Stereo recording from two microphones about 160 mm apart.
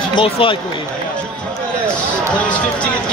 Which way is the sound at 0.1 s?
30° left (ahead or behind).